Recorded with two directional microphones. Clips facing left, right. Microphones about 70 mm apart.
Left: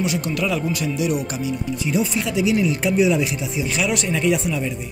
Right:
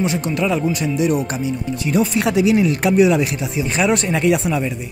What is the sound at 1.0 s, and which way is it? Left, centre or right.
Speech, right.